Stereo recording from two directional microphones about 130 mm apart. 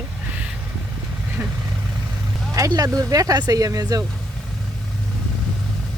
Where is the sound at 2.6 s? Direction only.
25° right (ahead or behind).